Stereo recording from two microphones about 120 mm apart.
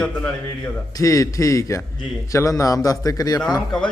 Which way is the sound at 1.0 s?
25° left (ahead or behind).